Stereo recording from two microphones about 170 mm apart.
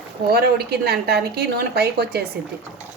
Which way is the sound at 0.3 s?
65° right (ahead or behind).